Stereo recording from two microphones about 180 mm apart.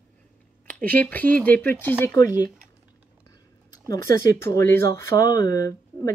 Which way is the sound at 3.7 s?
20° left (ahead or behind).